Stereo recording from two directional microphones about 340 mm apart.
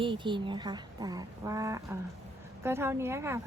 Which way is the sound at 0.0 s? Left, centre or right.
Centre.